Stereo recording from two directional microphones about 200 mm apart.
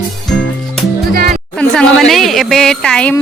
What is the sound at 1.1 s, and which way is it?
Music, 50° right (ahead or behind).